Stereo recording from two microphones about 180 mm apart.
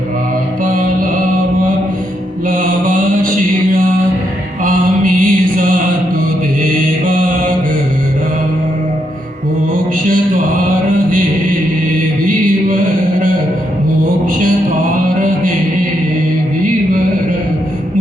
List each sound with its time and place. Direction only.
2.5 s mantra: 50° right (ahead or behind)
4.6 s mantra: 50° right (ahead or behind)